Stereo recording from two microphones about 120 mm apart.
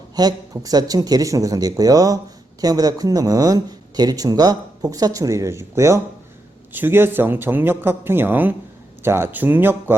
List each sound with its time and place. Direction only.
0.2 s speech: 30° right (ahead or behind)